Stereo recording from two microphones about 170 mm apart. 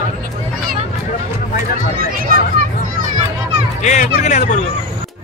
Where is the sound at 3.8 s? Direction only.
45° left (ahead or behind).